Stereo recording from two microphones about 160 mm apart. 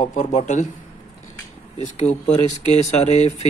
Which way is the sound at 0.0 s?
50° left (ahead or behind).